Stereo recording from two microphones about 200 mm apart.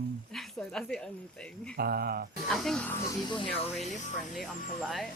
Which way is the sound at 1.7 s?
50° right (ahead or behind).